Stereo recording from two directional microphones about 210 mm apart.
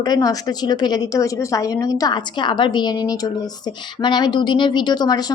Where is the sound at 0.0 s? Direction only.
20° left (ahead or behind).